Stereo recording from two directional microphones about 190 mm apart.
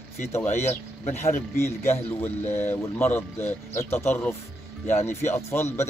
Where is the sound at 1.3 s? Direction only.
10° left (ahead or behind).